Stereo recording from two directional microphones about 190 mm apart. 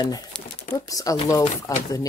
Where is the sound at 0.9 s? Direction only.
20° left (ahead or behind).